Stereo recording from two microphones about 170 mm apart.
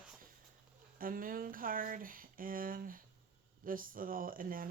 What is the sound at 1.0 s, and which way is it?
Speech, 55° right (ahead or behind).